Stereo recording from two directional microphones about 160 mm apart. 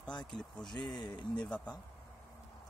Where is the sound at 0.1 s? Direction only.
25° left (ahead or behind).